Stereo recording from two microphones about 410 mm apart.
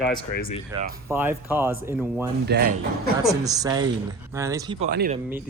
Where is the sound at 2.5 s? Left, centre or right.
Right.